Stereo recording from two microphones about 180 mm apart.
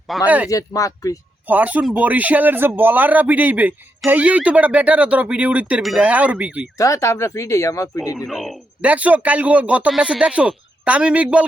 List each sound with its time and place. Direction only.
0.3 s speech: 10° right (ahead or behind)
0.5 s speech: 20° left (ahead or behind)
1.5 s speech: 10° right (ahead or behind)
6.7 s speech: 15° left (ahead or behind)
8.1 s speech: centre (ahead or behind)